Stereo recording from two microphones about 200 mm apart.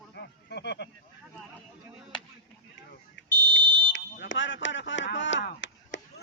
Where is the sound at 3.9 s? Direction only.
65° left (ahead or behind).